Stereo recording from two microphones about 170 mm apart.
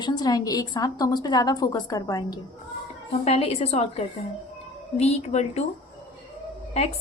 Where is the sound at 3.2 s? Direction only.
35° left (ahead or behind).